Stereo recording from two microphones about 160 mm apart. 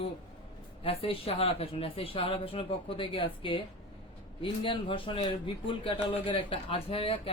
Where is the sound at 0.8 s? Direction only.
35° left (ahead or behind).